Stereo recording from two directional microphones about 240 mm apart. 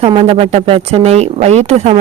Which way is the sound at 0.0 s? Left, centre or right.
Right.